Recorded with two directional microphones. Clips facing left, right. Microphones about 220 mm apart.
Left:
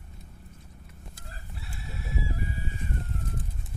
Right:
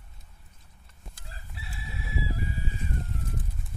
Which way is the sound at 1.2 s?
50° left (ahead or behind).